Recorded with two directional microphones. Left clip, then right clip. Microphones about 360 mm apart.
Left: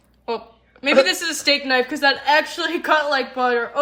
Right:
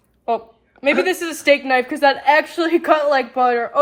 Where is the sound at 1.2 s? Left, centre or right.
Centre.